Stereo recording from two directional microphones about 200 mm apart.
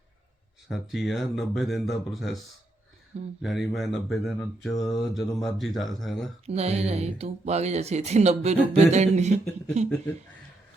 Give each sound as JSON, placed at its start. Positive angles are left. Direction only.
{"t": 0.7, "sound": "speech", "side_deg": 0}
{"t": 3.4, "sound": "speech", "side_deg": 0}
{"t": 6.4, "sound": "speech", "side_deg": -30}